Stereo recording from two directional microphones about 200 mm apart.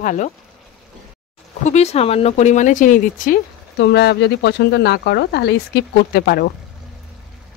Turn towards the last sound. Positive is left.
turn(degrees=50)  # may be behind; listen again after turning